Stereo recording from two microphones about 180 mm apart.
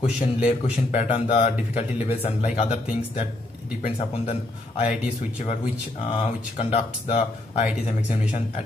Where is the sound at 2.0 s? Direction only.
35° left (ahead or behind).